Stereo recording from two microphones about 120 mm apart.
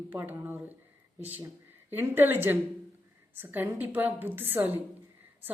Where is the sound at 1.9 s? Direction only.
15° right (ahead or behind).